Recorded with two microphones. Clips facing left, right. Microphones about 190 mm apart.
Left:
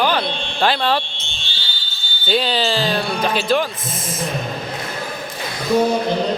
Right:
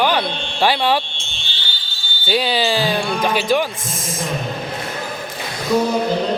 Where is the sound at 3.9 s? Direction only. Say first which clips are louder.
Even; 45° right (ahead or behind).